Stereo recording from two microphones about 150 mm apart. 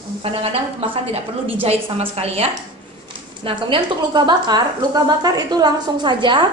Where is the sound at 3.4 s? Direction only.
30° right (ahead or behind).